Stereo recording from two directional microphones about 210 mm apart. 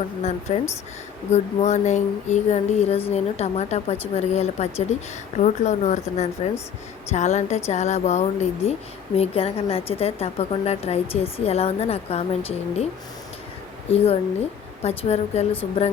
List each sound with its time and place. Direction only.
0.5 s a sound: 30° left (ahead or behind)
9.1 s a woman's voice: 30° left (ahead or behind)
13.9 s a woman's voice: 30° left (ahead or behind)